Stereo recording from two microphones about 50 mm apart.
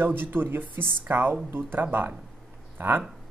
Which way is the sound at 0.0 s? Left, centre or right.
Right.